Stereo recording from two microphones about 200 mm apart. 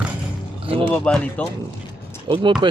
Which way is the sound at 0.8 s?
5° left (ahead or behind).